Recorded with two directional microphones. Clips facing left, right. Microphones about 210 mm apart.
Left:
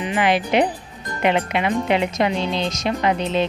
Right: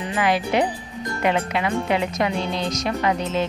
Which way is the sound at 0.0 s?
20° left (ahead or behind).